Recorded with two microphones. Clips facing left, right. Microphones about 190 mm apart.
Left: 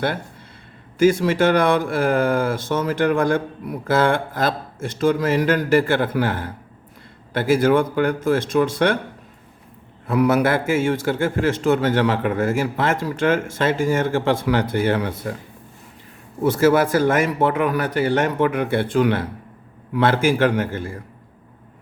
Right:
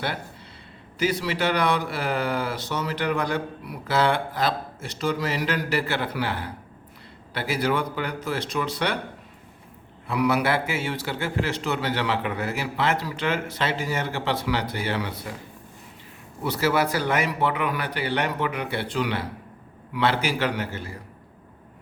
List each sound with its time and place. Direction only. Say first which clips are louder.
0.9 s speech: left 9 dB; 50° left (ahead or behind)
10.1 s speech: left 5 dB; 45° left (ahead or behind)
16.4 s speech: left 7 dB; 50° left (ahead or behind)